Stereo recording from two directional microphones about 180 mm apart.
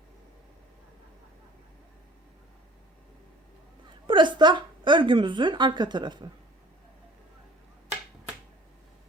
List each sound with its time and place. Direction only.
4.0 s a woman's voice: 25° right (ahead or behind)